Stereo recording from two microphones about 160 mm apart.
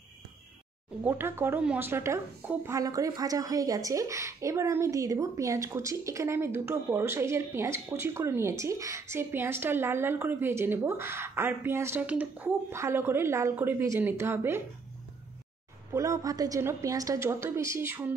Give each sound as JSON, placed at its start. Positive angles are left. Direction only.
{"t": 1.0, "sound": "speech", "side_deg": -15}
{"t": 15.9, "sound": "speech", "side_deg": -20}